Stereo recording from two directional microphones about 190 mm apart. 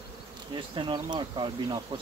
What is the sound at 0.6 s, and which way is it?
Speech, 25° right (ahead or behind).